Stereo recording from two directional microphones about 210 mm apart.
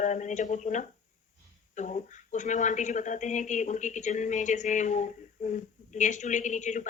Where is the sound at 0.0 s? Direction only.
35° left (ahead or behind).